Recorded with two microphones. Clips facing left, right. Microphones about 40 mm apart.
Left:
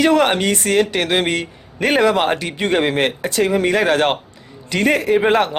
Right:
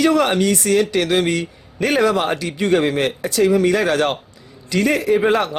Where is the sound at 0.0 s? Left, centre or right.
Left.